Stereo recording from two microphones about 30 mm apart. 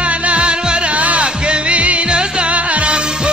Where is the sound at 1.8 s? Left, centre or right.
Right.